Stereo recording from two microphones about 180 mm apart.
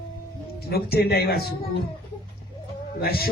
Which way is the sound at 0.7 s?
60° left (ahead or behind).